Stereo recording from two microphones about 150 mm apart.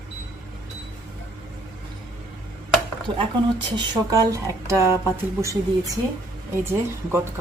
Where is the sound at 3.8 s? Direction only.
25° right (ahead or behind).